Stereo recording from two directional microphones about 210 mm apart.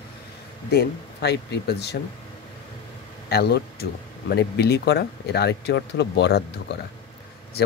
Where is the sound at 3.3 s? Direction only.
50° left (ahead or behind).